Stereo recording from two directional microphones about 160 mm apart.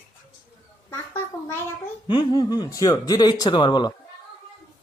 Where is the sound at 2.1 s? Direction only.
25° left (ahead or behind).